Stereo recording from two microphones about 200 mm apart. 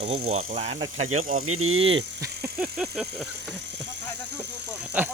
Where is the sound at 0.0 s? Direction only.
30° right (ahead or behind).